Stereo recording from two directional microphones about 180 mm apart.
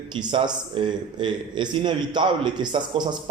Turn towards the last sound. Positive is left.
turn(degrees=-25)  # may be behind; listen again after turning